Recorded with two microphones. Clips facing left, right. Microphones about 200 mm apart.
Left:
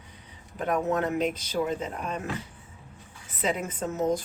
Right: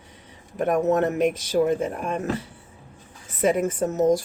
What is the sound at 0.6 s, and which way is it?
Speech, 45° right (ahead or behind).